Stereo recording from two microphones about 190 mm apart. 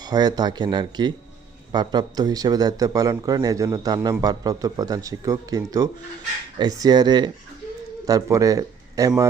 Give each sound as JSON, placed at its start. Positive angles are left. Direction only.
{"t": 0.0, "sound": "a man's voice", "side_deg": -20}